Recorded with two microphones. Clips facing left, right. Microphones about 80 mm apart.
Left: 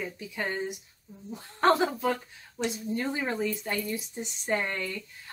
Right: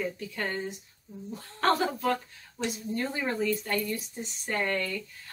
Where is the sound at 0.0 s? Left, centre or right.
Centre.